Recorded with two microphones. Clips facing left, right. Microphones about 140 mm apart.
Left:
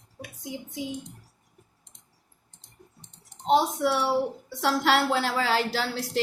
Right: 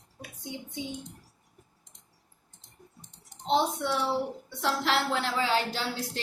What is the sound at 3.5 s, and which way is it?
Speech, 90° left.